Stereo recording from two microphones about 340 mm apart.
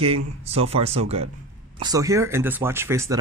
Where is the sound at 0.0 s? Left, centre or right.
Centre.